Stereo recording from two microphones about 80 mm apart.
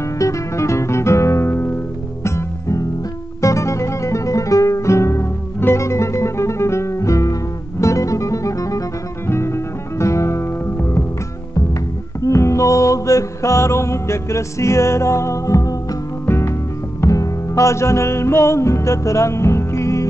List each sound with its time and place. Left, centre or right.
0.2 s music: left
12.3 s music: left
16.3 s music: left